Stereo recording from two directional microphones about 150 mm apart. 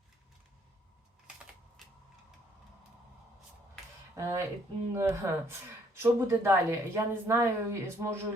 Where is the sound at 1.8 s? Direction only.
Centre (ahead or behind).